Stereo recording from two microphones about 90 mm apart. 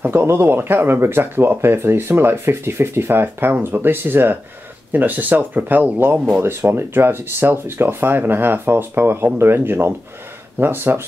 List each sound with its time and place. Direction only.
0.0 s speech: 25° right (ahead or behind)